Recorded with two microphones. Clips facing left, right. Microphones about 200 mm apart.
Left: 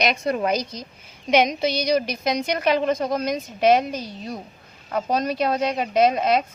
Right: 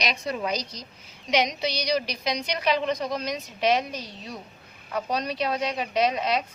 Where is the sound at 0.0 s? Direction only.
55° left (ahead or behind).